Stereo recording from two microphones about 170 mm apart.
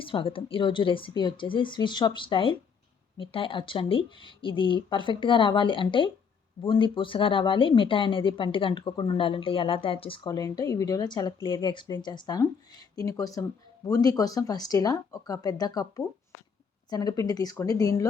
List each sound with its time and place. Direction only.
0.0 s speech: 30° left (ahead or behind)